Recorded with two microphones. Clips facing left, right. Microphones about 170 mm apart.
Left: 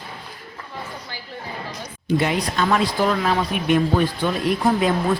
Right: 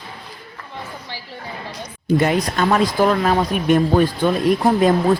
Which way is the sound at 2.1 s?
45° right (ahead or behind).